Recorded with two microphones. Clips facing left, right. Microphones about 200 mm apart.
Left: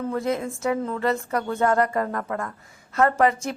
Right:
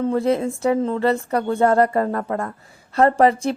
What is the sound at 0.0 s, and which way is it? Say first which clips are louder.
A woman's voice: right 6 dB; 30° right (ahead or behind).